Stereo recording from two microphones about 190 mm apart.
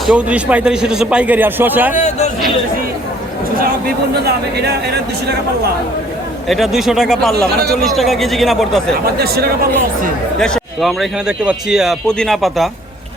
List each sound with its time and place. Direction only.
0.1 s a man's voice: 5° right (ahead or behind)
2.0 s speech: 40° left (ahead or behind)
4.3 s speech: 60° right (ahead or behind)
6.5 s a man's voice: centre (ahead or behind)
9.0 s speech: 55° right (ahead or behind)
10.4 s a man's voice: centre (ahead or behind)